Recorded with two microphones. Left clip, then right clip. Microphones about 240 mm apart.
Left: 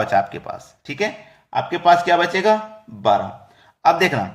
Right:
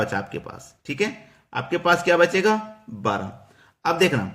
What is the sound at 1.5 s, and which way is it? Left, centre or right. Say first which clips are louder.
Speech: left 6 dB; centre.